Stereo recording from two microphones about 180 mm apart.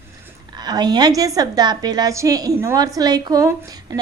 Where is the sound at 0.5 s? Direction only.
25° right (ahead or behind).